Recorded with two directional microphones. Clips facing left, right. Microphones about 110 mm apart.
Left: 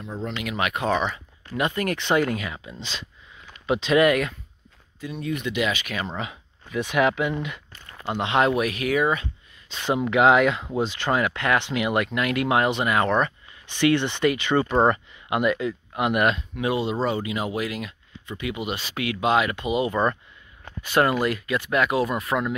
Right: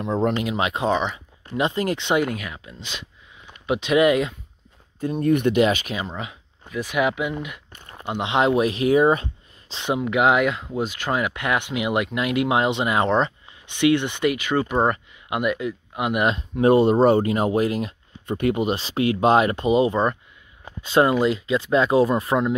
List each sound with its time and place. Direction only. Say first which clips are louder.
0.0 s speech: right 10 dB; 65° right (ahead or behind)
0.5 s speech: right 2 dB; 25° right (ahead or behind)
2.2 s speech: left 1 dB; 5° right (ahead or behind)
2.9 s speech: even; 10° right (ahead or behind)
5.0 s speech: right 9 dB; 50° right (ahead or behind)
5.6 s speech: right 7 dB; 40° right (ahead or behind)
6.0 s speech: left 1 dB; centre (ahead or behind)
7.7 s speech: right 1 dB; 20° right (ahead or behind)
9.9 s speech: left 1 dB; 5° right (ahead or behind)
16.3 s speech: right 1 dB; 30° right (ahead or behind)
16.6 s speech: right 9 dB; 50° right (ahead or behind)
19.9 s speech: right 1 dB; 20° right (ahead or behind)